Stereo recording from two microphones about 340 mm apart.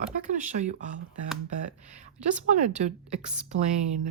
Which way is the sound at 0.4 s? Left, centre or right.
Right.